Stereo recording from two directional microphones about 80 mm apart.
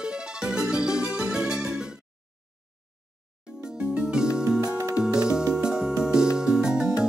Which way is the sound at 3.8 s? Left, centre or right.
Centre.